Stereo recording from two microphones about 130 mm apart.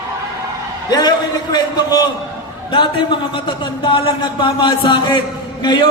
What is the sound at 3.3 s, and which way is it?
Speech, 35° left (ahead or behind).